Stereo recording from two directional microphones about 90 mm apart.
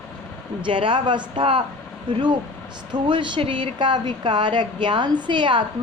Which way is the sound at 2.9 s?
60° right (ahead or behind).